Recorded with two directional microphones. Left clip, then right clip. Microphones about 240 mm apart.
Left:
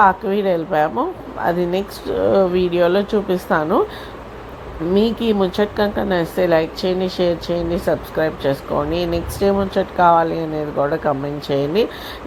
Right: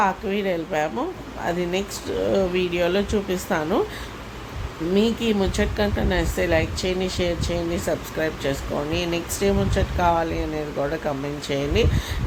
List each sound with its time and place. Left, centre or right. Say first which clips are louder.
0.0 s a woman's voice: left 8 dB; centre
4.9 s a woman's voice: left 4 dB; centre